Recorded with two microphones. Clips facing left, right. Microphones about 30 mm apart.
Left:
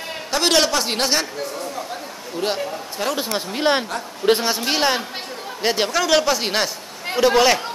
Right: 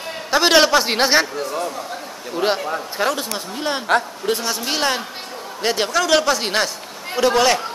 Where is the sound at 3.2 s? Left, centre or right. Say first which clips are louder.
Left 4 dB; left.